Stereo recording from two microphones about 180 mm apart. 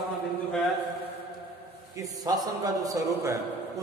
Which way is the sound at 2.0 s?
20° right (ahead or behind).